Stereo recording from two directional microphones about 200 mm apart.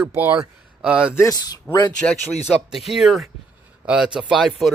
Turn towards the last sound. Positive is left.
turn(degrees=0)  # may be behind; listen again after turning